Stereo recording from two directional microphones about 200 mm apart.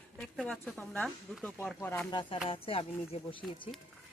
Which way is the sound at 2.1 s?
25° left (ahead or behind).